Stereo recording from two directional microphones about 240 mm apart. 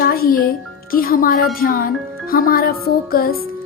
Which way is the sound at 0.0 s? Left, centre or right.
Left.